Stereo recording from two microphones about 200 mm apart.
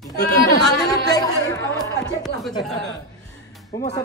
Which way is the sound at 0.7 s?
20° left (ahead or behind).